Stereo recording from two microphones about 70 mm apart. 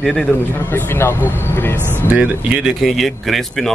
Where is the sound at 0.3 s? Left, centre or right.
Left.